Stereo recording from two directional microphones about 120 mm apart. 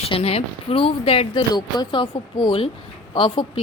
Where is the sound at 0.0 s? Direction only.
55° left (ahead or behind).